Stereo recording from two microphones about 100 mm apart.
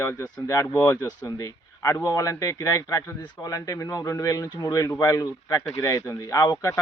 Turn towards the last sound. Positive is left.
turn(degrees=35)  # may be behind; listen again after turning